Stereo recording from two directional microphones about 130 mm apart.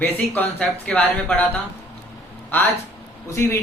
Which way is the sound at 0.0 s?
15° left (ahead or behind).